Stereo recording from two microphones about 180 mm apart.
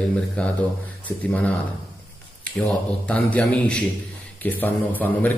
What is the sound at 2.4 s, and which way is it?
A man's voice, 10° left (ahead or behind).